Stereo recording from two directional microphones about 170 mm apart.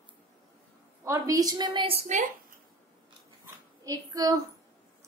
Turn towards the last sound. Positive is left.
turn(degrees=-20)  # may be behind; listen again after turning